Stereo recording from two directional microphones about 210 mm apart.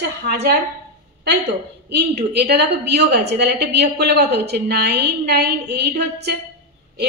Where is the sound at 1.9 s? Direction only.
50° right (ahead or behind).